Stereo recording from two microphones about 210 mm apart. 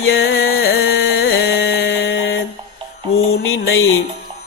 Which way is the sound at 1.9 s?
65° left (ahead or behind).